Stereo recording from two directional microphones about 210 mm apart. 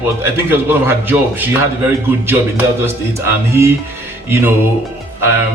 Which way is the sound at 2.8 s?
10° right (ahead or behind).